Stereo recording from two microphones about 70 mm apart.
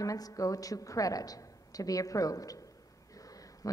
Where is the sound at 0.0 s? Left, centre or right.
Left.